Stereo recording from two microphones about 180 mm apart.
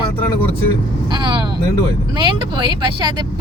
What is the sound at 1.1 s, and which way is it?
Speech, 25° right (ahead or behind).